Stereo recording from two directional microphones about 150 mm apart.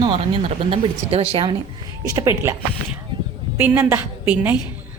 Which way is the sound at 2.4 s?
15° right (ahead or behind).